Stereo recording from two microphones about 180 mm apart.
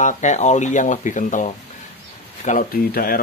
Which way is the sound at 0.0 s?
40° left (ahead or behind).